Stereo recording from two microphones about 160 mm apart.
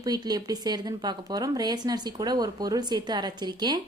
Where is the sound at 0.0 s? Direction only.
25° right (ahead or behind).